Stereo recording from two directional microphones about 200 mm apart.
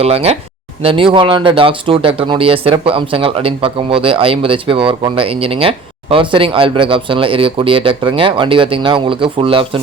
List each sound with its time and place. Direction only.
0.0 s speech: 30° right (ahead or behind)